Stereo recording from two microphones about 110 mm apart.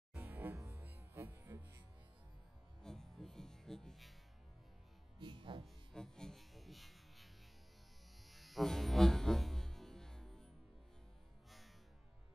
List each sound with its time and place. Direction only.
0.1 s music: 20° right (ahead or behind)
2.8 s music: 5° left (ahead or behind)
5.2 s music: 45° right (ahead or behind)
5.9 s music: 5° left (ahead or behind)
8.3 s music: centre (ahead or behind)